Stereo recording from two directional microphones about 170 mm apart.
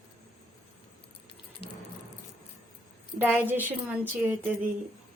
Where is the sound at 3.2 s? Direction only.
10° right (ahead or behind).